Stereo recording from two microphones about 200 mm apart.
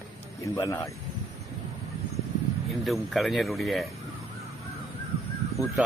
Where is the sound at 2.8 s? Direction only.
Centre (ahead or behind).